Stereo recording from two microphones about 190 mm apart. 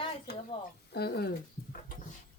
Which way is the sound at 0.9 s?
55° left (ahead or behind).